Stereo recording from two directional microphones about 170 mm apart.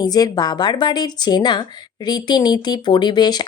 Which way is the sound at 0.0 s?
25° left (ahead or behind).